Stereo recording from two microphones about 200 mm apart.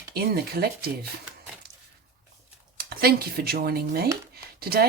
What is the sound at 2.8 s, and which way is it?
Speech, 50° right (ahead or behind).